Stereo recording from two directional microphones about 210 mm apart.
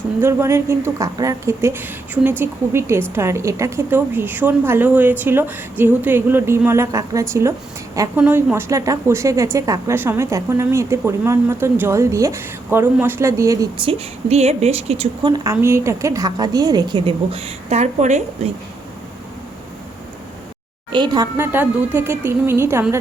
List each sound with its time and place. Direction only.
0.2 s a woman's voice: 10° right (ahead or behind); by 18.5 s 35° right (ahead or behind)
20.9 s a woman's voice: 20° right (ahead or behind)